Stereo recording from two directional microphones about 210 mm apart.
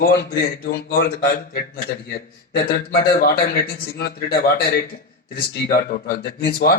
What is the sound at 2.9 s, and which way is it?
Speech, 45° left (ahead or behind).